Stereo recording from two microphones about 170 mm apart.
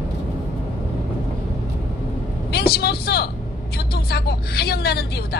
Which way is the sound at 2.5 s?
70° left (ahead or behind).